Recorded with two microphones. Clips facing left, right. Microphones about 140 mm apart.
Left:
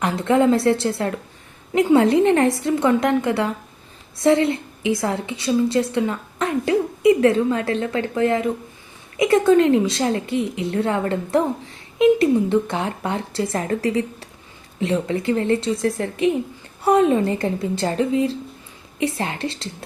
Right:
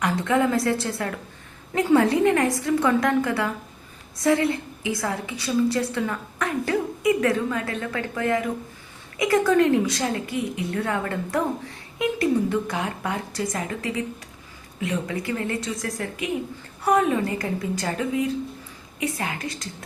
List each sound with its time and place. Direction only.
0.0 s a woman's voice: 25° left (ahead or behind)